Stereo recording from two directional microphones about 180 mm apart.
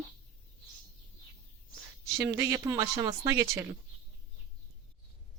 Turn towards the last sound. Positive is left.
turn(degrees=-15)  # may be behind; listen again after turning